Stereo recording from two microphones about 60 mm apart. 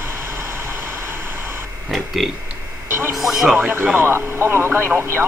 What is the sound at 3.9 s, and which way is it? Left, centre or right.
Vehicle, right.